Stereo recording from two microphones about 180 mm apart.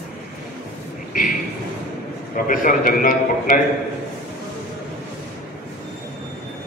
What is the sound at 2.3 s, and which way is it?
A man's voice, 50° left (ahead or behind).